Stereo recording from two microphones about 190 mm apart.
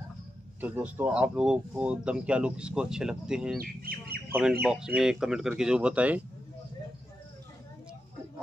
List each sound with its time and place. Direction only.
0.6 s speech: 10° right (ahead or behind)
3.5 s speech: 50° right (ahead or behind)
4.3 s speech: 5° right (ahead or behind)